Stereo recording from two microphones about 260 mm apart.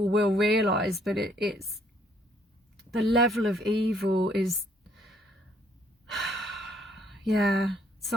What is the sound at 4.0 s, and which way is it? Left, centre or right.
Speech, right.